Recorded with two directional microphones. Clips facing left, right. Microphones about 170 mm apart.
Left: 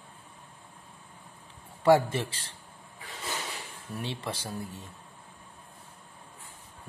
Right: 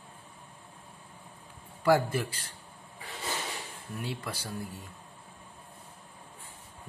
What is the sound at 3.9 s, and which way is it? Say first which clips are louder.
Speech: left 2 dB; 25° left (ahead or behind).